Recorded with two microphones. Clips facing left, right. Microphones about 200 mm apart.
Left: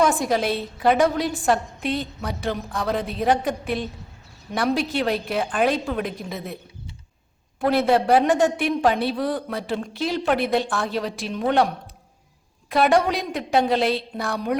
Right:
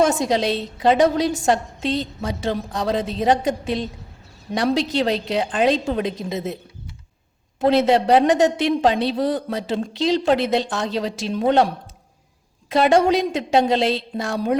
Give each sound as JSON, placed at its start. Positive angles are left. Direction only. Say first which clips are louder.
{"t": 0.1, "sound": "a woman's voice", "louder": "right 2 dB", "side_deg": -20}
{"t": 7.6, "sound": "a woman's voice", "louder": "right 3 dB", "side_deg": -20}